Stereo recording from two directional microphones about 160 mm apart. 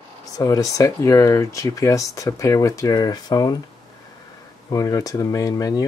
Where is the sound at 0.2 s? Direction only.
20° left (ahead or behind).